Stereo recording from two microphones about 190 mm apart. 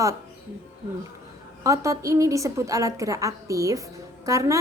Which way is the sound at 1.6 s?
15° right (ahead or behind).